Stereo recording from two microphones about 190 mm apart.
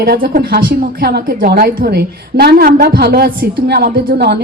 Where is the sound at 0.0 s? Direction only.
55° right (ahead or behind).